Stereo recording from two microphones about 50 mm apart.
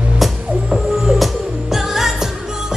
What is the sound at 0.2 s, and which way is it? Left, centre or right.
Music, centre.